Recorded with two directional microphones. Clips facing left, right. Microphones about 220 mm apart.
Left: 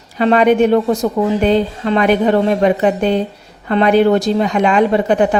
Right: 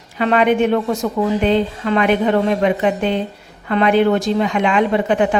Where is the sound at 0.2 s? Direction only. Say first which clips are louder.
Left 4 dB; 40° left (ahead or behind).